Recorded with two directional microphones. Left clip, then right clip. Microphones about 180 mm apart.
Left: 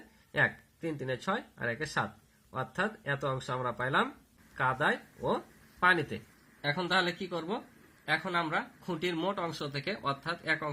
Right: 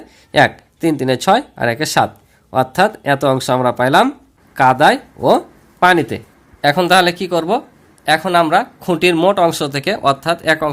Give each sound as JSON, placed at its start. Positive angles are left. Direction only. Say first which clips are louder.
{"t": 0.3, "sound": "speech", "louder": "right 17 dB", "side_deg": -60}
{"t": 5.8, "sound": "speech", "louder": "right 15 dB", "side_deg": -50}